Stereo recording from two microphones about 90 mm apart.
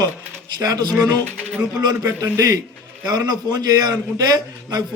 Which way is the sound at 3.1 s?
45° right (ahead or behind).